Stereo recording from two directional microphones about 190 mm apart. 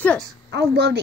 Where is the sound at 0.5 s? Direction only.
60° right (ahead or behind).